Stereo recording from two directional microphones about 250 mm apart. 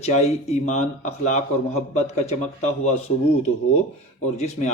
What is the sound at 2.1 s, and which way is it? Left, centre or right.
Speech, left.